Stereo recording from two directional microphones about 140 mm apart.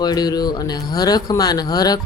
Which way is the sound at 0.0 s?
30° left (ahead or behind).